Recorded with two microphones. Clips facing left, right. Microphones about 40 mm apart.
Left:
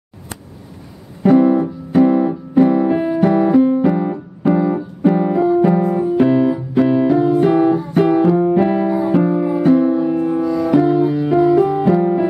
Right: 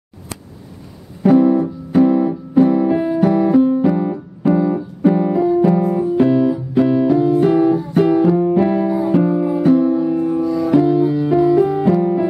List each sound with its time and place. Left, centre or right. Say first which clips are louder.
1.3 s music: even; centre
2.0 s piano: even; centre
5.8 s keyboard: even; centre
6.0 s piano: even; centre
8.4 s music: left 1 dB; left